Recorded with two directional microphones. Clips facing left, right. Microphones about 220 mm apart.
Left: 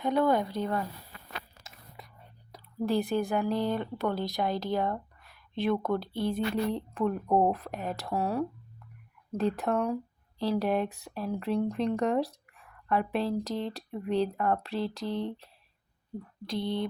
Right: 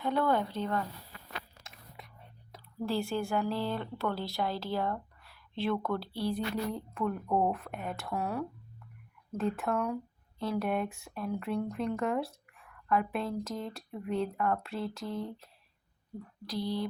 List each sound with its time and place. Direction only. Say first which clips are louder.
0.0 s speech: left 3 dB; 15° left (ahead or behind)
2.0 s whispering: left 2 dB; centre (ahead or behind)
2.8 s speech: left 4 dB; 20° left (ahead or behind); by 14.8 s 35° left (ahead or behind)
15.0 s a sound: left 4 dB; 80° left
16.5 s speech: left 2 dB; 25° left (ahead or behind)